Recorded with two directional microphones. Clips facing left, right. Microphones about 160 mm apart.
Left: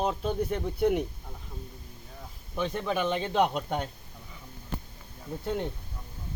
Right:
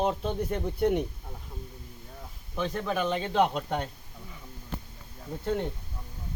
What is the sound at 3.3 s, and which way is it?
Speech, 10° left (ahead or behind).